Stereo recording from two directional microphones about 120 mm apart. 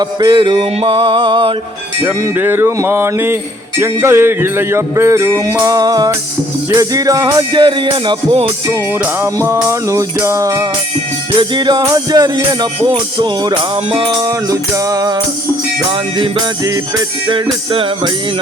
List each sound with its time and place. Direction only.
0.0 s music: 35° right (ahead or behind)
2.0 s music: 15° right (ahead or behind)
7.5 s music: 45° right (ahead or behind)
9.2 s music: 20° right (ahead or behind)
11.3 s music: 40° right (ahead or behind)
14.2 s music: 25° right (ahead or behind)
15.9 s music: 45° right (ahead or behind)